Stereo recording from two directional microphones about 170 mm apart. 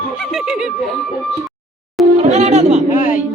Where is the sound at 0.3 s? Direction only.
5° right (ahead or behind).